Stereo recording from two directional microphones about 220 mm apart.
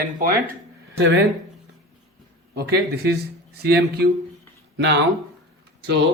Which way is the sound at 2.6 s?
45° right (ahead or behind).